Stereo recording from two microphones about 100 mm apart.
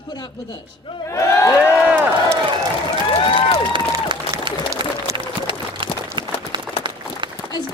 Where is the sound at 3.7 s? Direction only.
55° right (ahead or behind).